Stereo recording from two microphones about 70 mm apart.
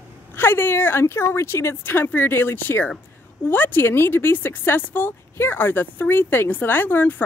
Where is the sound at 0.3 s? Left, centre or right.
Left.